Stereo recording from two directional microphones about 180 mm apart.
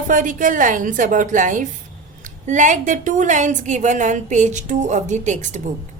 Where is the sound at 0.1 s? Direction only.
45° right (ahead or behind).